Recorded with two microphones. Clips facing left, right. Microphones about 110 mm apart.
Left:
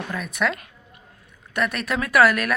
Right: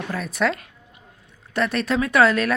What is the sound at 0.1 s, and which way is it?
Speech, 35° right (ahead or behind).